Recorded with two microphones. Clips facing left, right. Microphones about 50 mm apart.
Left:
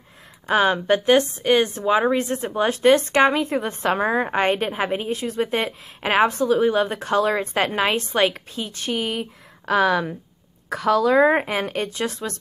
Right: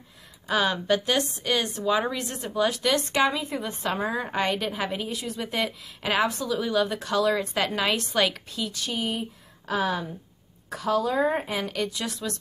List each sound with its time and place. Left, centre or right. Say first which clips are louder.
0.5 s a woman's voice: left 5 dB; left
8.9 s speech: left 6 dB; left